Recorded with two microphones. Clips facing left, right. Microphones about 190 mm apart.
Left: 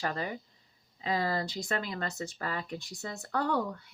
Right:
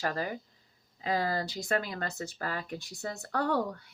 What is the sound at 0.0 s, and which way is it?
Speech, 45° right (ahead or behind).